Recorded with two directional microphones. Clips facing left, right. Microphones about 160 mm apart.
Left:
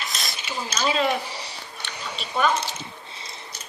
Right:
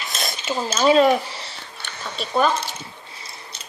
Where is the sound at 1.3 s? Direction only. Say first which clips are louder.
Even; 15° left (ahead or behind).